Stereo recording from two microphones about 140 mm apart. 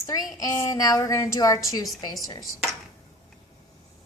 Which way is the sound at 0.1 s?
25° left (ahead or behind).